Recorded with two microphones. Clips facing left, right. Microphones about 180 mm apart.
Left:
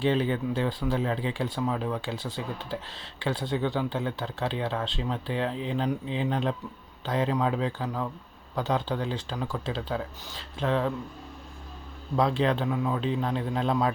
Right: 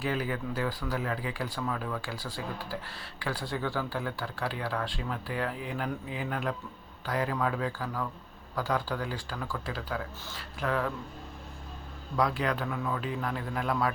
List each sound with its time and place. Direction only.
0.0 s speech: 25° left (ahead or behind)
12.1 s speech: 25° left (ahead or behind)